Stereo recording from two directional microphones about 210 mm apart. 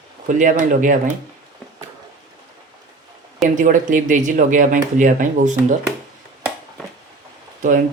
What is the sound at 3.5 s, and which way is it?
Speech, 40° right (ahead or behind).